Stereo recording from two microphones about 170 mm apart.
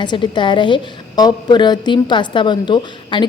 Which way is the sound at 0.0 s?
25° left (ahead or behind).